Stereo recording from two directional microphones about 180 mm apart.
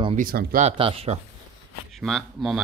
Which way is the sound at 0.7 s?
30° right (ahead or behind).